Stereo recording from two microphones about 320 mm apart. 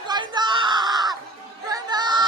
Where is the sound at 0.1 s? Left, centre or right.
Centre.